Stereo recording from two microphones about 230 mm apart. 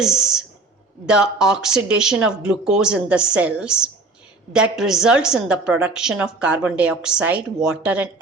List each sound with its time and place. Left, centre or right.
0.0 s a woman's voice: centre